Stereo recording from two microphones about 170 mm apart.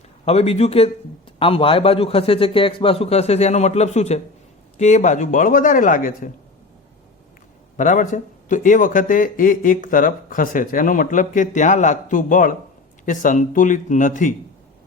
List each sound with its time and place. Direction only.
0.3 s a man's voice: 35° left (ahead or behind)
7.8 s speech: 50° left (ahead or behind)